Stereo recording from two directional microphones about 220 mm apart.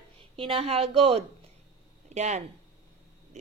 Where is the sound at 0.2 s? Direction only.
25° right (ahead or behind).